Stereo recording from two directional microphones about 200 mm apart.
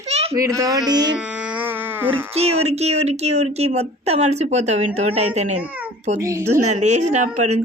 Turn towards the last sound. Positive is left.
turn(degrees=-35)  # may be behind; listen again after turning